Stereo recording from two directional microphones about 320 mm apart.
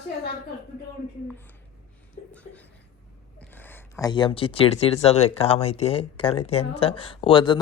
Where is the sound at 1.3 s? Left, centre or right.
Centre.